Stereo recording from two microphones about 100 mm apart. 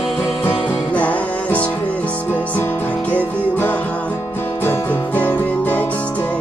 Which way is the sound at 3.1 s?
15° left (ahead or behind).